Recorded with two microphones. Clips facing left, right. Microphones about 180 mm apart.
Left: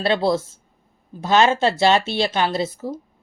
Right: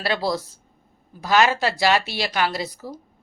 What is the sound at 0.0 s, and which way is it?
Speech, 25° left (ahead or behind).